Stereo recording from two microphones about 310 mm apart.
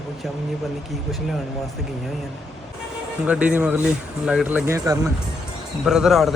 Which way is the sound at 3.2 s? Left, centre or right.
Centre.